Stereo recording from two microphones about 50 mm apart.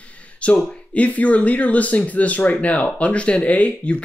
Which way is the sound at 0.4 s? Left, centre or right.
Left.